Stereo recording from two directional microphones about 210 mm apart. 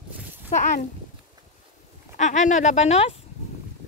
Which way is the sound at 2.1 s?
35° left (ahead or behind).